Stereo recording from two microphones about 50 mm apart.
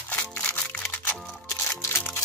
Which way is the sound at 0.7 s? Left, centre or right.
Left.